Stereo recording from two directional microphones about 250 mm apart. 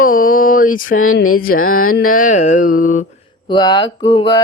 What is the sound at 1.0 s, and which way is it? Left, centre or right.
Mantra, left.